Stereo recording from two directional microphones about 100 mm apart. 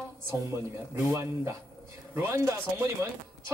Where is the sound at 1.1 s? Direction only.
30° right (ahead or behind).